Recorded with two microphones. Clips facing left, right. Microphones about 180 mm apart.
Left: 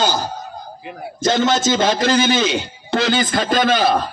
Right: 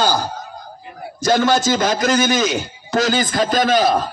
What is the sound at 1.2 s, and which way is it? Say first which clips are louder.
A man's voice: right 1 dB; 25° left (ahead or behind).